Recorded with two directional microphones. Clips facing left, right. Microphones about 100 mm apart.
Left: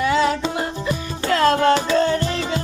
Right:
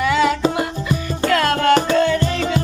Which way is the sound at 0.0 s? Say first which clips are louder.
Right 2 dB; 35° left (ahead or behind).